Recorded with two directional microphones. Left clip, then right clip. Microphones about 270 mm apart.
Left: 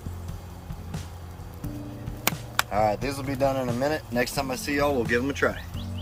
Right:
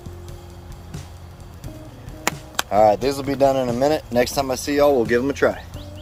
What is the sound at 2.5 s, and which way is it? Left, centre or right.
Speech, right.